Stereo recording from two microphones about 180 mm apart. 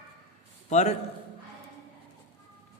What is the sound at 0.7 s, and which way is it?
Speech, 40° left (ahead or behind).